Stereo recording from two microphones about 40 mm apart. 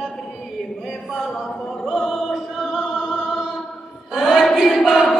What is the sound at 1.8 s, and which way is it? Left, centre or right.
Music, centre.